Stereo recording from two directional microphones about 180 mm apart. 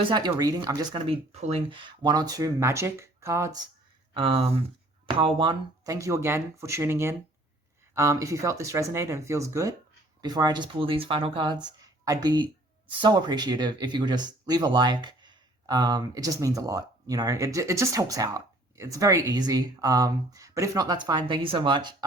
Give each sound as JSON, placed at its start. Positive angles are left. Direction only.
{"t": 0.0, "sound": "speech", "side_deg": -25}
{"t": 4.1, "sound": "speech", "side_deg": -30}